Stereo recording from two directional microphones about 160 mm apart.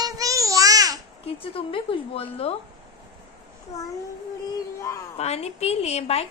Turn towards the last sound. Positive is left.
turn(degrees=40)  # may be behind; listen again after turning